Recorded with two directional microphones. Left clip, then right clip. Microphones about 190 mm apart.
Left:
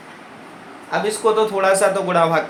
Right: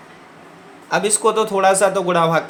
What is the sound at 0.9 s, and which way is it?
A man's voice, 45° right (ahead or behind).